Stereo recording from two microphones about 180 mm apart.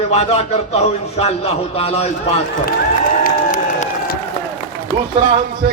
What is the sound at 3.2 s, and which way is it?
Applause, 45° left (ahead or behind).